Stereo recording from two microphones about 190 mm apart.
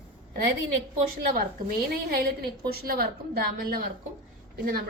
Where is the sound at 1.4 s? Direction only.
55° right (ahead or behind).